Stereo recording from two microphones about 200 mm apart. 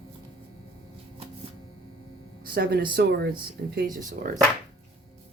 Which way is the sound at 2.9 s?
55° right (ahead or behind).